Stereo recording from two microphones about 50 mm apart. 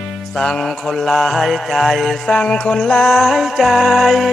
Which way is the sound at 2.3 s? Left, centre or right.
Centre.